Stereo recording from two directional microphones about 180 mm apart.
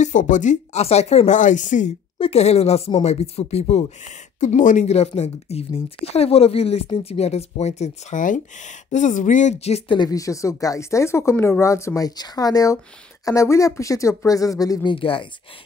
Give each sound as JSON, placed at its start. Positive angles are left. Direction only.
{"t": 0.0, "sound": "speech", "side_deg": 45}
{"t": 2.1, "sound": "speech", "side_deg": 35}